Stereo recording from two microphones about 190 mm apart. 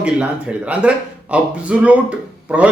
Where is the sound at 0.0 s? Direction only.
5° right (ahead or behind).